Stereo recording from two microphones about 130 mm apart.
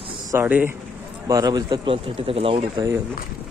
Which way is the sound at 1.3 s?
30° right (ahead or behind).